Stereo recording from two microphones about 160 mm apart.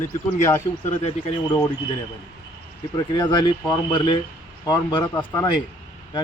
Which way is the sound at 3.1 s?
30° left (ahead or behind).